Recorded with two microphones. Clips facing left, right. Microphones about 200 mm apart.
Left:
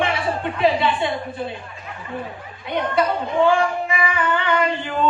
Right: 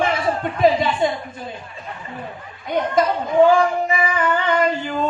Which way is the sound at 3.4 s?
40° right (ahead or behind).